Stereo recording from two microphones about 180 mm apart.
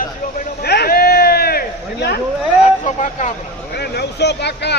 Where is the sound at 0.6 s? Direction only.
60° left (ahead or behind).